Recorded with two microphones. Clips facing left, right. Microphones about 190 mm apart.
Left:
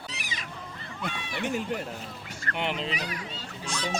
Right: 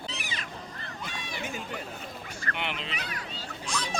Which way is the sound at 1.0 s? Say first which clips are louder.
Left 6 dB; 70° left (ahead or behind).